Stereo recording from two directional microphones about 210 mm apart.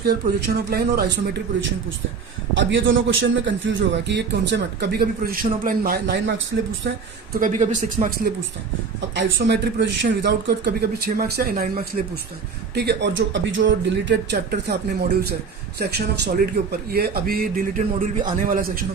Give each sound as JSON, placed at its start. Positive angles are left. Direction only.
{"t": 0.0, "sound": "speech", "side_deg": -45}
{"t": 2.6, "sound": "a man's voice", "side_deg": -60}
{"t": 7.3, "sound": "speech", "side_deg": -40}
{"t": 9.1, "sound": "a man's voice", "side_deg": -55}